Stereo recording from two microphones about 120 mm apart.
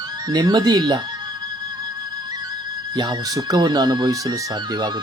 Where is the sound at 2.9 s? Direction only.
35° right (ahead or behind).